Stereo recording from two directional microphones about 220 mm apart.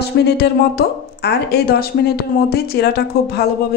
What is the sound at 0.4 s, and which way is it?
A woman's voice, 45° left (ahead or behind).